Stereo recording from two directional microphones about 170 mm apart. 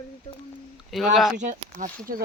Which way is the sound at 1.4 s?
45° right (ahead or behind).